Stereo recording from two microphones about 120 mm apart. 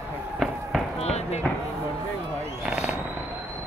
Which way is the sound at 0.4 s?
Centre (ahead or behind).